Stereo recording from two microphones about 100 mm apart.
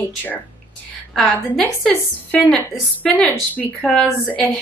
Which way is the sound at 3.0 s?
10° left (ahead or behind).